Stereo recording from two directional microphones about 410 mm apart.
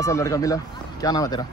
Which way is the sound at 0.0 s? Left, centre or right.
Centre.